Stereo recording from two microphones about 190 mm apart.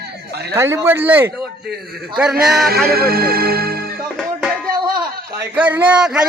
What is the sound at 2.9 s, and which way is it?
Speech, 50° right (ahead or behind).